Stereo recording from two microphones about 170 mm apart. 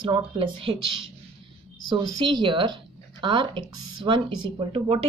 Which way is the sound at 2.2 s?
25° right (ahead or behind).